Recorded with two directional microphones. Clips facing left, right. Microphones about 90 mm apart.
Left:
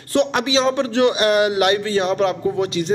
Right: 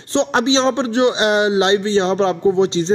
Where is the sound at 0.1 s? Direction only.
30° right (ahead or behind).